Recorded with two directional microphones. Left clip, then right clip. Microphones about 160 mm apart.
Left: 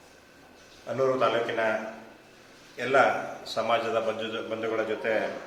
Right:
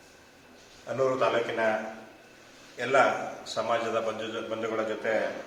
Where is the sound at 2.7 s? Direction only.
15° left (ahead or behind).